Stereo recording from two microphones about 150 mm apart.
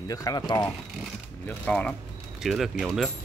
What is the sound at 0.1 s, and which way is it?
Speech, 25° left (ahead or behind).